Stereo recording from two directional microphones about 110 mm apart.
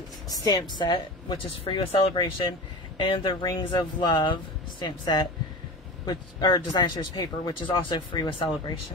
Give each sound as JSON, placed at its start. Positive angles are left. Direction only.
{"t": 0.3, "sound": "speech", "side_deg": 35}